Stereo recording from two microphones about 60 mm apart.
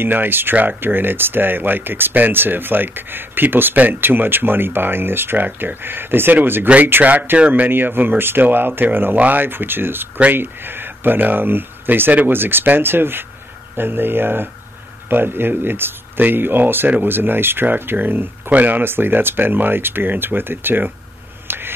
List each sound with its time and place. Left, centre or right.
0.0 s speech: right
7.7 s speech: right
21.5 s a sound: right